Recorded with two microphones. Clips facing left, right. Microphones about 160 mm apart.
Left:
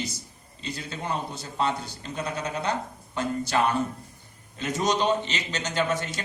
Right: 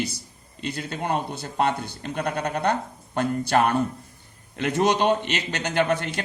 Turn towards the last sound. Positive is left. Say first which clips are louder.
# right 4 dB
turn(degrees=-60)  # may be behind; listen again after turning